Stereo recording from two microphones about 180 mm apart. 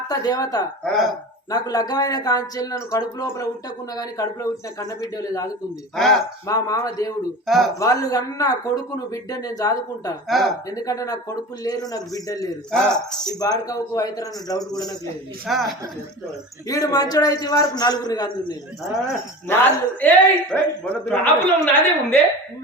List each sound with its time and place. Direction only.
0.1 s speech: 20° left (ahead or behind)
0.9 s speech: centre (ahead or behind)
1.5 s speech: 20° left (ahead or behind)
6.5 s speech: 20° left (ahead or behind)
7.4 s speech: centre (ahead or behind)
7.8 s speech: 20° left (ahead or behind)
10.2 s speech: centre (ahead or behind)
10.7 s speech: 20° left (ahead or behind)
12.7 s speech: 5° left (ahead or behind)
13.2 s speech: 20° left (ahead or behind)
15.4 s speech: centre (ahead or behind)
16.6 s speech: 20° left (ahead or behind)
19.5 s a man's voice: 10° left (ahead or behind)